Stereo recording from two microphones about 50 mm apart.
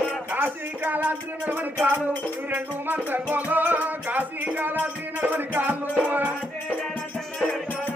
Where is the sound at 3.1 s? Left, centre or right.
Right.